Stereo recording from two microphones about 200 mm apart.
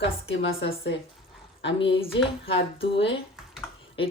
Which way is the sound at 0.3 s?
70° left (ahead or behind).